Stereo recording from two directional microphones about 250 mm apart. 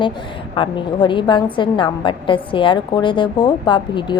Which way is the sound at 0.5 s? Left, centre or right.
Centre.